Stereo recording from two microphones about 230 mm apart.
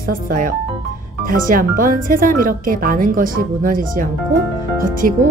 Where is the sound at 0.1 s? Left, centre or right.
Right.